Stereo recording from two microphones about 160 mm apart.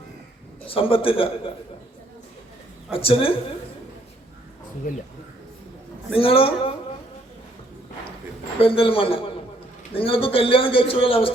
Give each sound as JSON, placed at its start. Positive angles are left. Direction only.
{"t": 0.7, "sound": "a man's voice", "side_deg": 35}
{"t": 2.9, "sound": "a man's voice", "side_deg": 35}
{"t": 6.1, "sound": "a man's voice", "side_deg": 35}
{"t": 8.6, "sound": "a man's voice", "side_deg": 35}